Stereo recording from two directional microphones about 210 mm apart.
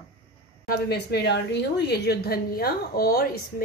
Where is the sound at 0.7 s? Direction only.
50° left (ahead or behind).